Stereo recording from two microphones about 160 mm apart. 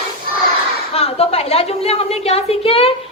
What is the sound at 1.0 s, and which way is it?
A woman's voice, 40° left (ahead or behind).